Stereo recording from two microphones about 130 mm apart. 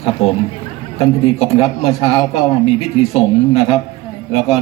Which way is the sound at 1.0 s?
50° left (ahead or behind).